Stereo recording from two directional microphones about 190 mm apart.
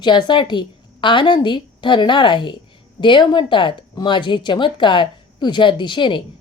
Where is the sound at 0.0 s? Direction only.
25° left (ahead or behind).